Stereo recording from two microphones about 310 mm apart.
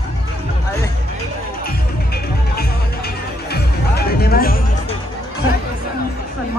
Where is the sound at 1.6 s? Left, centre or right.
Left.